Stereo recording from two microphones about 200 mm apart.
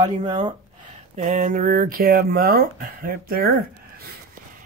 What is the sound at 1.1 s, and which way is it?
Speech, 35° right (ahead or behind).